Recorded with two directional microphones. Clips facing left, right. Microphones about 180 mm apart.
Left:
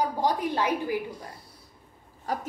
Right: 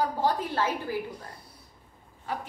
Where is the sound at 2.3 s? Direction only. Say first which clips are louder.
Left 3 dB; 40° left (ahead or behind).